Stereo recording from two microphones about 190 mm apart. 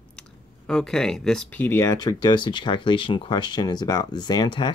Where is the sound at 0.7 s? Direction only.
5° left (ahead or behind).